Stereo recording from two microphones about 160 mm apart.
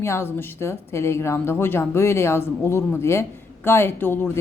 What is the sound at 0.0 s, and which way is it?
Speech, 15° left (ahead or behind).